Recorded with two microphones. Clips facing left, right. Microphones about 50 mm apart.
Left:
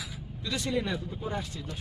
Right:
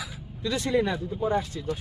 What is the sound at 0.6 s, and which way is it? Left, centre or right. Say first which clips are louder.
Speech: right 6 dB; right.